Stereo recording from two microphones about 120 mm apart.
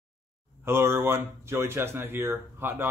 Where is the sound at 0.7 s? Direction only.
20° right (ahead or behind).